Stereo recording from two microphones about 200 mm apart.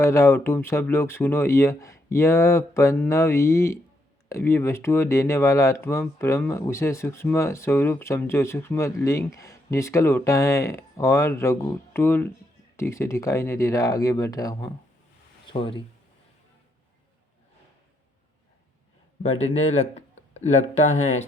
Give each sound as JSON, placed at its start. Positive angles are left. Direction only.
{"t": 0.0, "sound": "speech", "side_deg": 15}
{"t": 19.5, "sound": "speech", "side_deg": 30}